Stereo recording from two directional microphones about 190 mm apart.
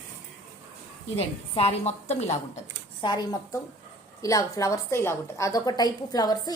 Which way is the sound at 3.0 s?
20° left (ahead or behind).